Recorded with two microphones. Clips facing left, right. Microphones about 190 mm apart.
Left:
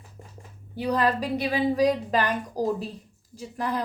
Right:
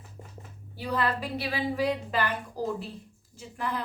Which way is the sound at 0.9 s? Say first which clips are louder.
Left 5 dB; 40° left (ahead or behind).